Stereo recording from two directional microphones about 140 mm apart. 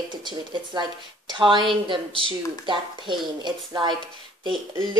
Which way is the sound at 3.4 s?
30° right (ahead or behind).